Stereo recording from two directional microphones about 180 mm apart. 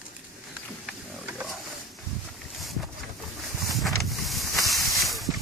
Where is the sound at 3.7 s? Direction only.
Centre (ahead or behind).